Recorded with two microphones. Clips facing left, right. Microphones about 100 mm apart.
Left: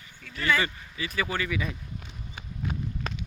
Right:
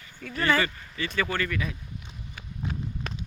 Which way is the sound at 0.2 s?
45° right (ahead or behind).